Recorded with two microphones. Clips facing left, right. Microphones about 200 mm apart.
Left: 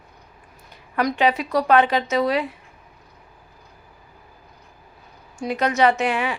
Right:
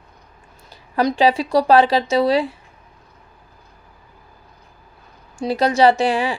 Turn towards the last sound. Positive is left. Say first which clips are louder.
# right 4 dB
turn(degrees=-30)  # may be behind; listen again after turning